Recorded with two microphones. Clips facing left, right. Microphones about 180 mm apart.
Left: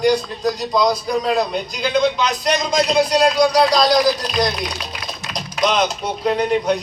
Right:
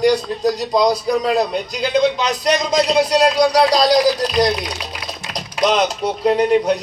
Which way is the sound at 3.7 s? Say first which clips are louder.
Right 1 dB; 35° right (ahead or behind).